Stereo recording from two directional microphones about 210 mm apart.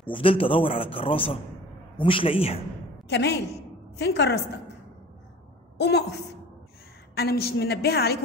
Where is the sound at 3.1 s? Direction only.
55° left (ahead or behind).